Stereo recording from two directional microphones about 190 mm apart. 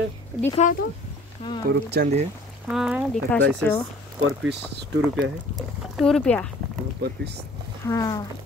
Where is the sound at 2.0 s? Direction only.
55° right (ahead or behind).